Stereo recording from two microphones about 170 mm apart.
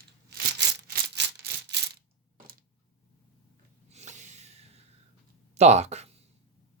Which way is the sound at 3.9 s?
45° right (ahead or behind).